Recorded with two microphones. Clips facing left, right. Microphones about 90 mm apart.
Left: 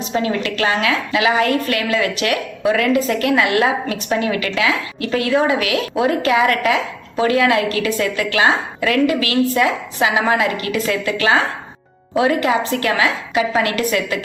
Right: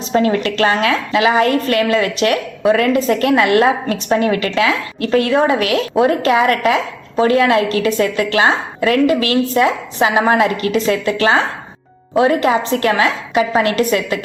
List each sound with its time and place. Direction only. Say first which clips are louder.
0.1 s a woman's voice: right 6 dB; 40° right (ahead or behind)
10.7 s a woman's voice: right 4 dB; 25° right (ahead or behind)